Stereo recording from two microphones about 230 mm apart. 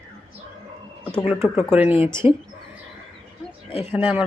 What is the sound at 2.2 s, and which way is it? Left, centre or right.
Speech, left.